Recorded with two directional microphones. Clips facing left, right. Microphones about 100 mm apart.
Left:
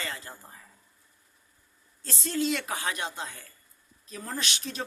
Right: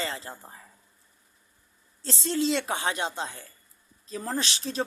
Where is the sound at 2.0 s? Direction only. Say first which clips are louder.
Right 2 dB; 30° right (ahead or behind).